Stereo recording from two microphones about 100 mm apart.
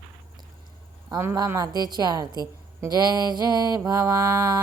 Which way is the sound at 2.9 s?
40° right (ahead or behind).